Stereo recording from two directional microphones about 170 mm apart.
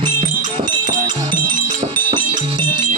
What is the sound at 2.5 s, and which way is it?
Music, 25° right (ahead or behind).